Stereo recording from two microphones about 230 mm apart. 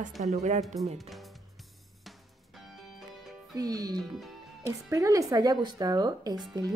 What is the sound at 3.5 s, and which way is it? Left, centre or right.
A woman's voice, centre.